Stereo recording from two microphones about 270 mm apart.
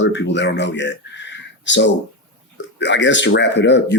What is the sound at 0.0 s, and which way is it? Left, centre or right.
Speech, left.